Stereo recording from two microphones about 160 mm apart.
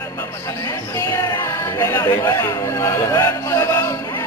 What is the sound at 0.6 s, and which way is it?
Chatter, 20° left (ahead or behind).